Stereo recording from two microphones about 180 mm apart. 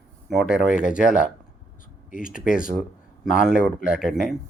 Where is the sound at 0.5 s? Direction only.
5° right (ahead or behind).